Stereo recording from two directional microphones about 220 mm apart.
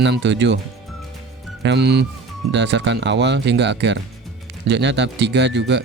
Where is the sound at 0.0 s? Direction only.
55° right (ahead or behind).